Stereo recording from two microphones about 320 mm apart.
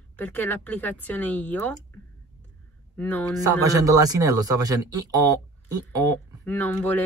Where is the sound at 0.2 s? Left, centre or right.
Centre.